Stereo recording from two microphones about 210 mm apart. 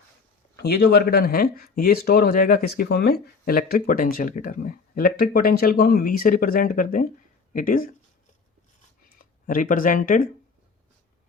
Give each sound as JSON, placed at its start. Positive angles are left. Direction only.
{"t": 0.6, "sound": "speech", "side_deg": 50}
{"t": 9.1, "sound": "speech", "side_deg": 40}